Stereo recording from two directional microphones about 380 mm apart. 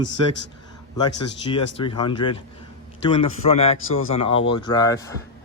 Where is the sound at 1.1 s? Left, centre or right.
Left.